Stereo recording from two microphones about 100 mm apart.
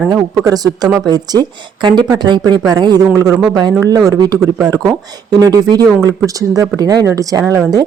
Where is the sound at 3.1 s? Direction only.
30° right (ahead or behind).